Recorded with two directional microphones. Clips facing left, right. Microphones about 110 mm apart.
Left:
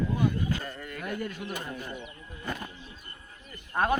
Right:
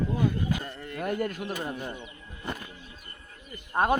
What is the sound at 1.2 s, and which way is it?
Speech, 50° right (ahead or behind).